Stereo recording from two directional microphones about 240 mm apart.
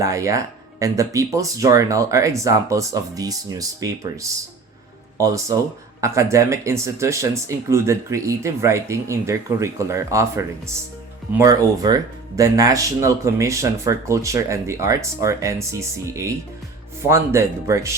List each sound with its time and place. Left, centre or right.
0.0 s speech: centre